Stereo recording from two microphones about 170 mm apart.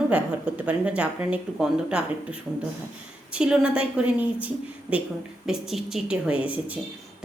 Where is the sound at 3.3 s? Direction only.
5° right (ahead or behind).